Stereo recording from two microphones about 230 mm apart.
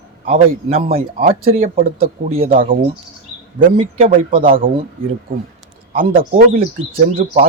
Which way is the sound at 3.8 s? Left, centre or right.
Right.